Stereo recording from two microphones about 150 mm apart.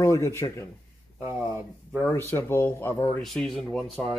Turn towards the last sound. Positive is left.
turn(degrees=5)  # may be behind; listen again after turning